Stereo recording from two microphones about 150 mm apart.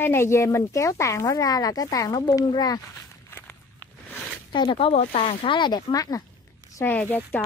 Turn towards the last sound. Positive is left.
turn(degrees=10)  # may be behind; listen again after turning